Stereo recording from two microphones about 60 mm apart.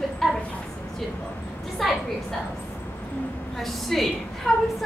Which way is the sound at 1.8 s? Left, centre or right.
Centre.